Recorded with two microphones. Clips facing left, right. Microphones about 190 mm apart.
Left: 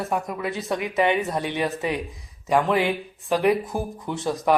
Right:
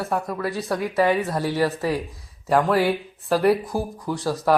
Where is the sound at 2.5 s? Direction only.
5° right (ahead or behind).